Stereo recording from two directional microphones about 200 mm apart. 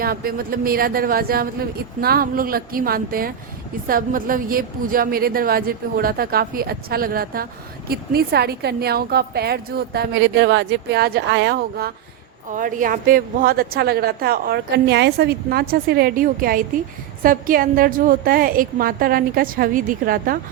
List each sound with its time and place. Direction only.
0.0 s speech: 45° right (ahead or behind)
12.5 s speech: 40° right (ahead or behind)